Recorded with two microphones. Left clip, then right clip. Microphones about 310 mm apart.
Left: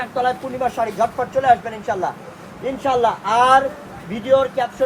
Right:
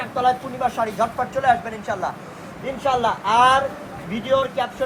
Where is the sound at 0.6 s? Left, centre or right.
Left.